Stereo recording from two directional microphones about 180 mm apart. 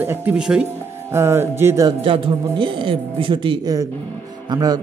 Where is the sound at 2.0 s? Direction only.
30° right (ahead or behind).